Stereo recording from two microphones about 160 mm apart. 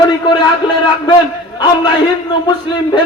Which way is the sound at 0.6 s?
30° left (ahead or behind).